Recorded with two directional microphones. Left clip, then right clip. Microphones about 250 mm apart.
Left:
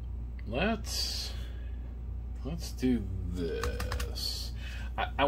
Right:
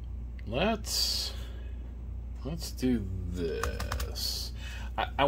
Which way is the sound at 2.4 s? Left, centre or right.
Right.